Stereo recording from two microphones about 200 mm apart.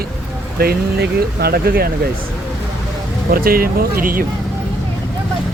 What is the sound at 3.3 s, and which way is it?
Speech, 45° right (ahead or behind).